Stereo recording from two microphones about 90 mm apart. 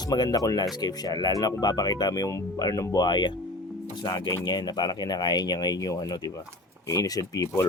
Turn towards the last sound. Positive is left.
turn(degrees=40)  # may be behind; listen again after turning